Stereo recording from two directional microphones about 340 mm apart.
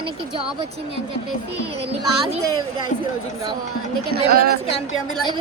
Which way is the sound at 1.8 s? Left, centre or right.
Centre.